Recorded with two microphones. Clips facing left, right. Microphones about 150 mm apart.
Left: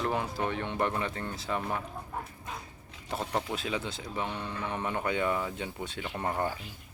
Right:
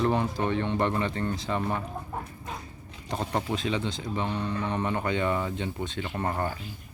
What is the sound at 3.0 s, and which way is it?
Speech, 5° left (ahead or behind).